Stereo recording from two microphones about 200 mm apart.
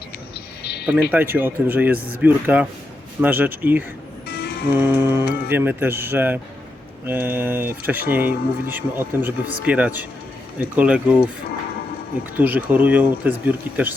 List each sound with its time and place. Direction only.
0.6 s a sound: 55° left (ahead or behind)
1.1 s speech: 10° right (ahead or behind)
12.4 s speech: 10° right (ahead or behind)